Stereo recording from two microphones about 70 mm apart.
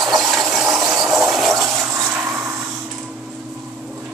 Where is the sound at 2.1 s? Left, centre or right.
Centre.